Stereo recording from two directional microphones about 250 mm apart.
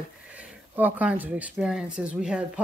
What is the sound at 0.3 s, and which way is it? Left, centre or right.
Speech, centre.